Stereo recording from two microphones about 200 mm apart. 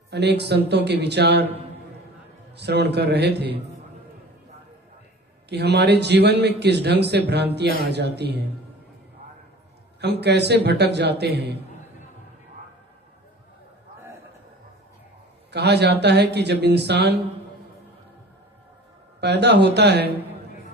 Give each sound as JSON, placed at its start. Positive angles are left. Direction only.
{"t": 0.1, "sound": "speech", "side_deg": -55}
{"t": 2.6, "sound": "speech", "side_deg": -55}
{"t": 5.5, "sound": "speech", "side_deg": -55}
{"t": 10.0, "sound": "speech", "side_deg": -55}
{"t": 15.5, "sound": "speech", "side_deg": -55}
{"t": 19.2, "sound": "speech", "side_deg": -55}